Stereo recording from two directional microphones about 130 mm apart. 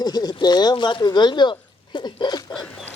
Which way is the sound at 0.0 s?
30° left (ahead or behind).